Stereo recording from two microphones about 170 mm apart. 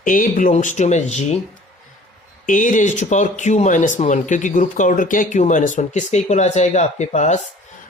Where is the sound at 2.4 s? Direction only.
50° left (ahead or behind).